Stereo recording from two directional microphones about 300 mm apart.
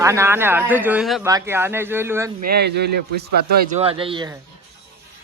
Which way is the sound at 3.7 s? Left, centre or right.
Centre.